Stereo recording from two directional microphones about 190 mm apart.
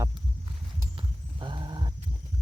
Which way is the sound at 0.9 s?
25° right (ahead or behind).